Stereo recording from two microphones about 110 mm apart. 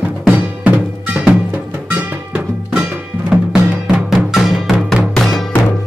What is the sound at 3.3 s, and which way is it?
Music, 5° right (ahead or behind).